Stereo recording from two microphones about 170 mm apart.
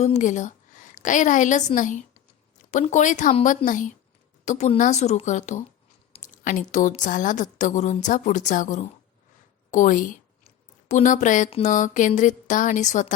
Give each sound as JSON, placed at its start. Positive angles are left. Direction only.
{"t": 0.0, "sound": "a woman's voice", "side_deg": 45}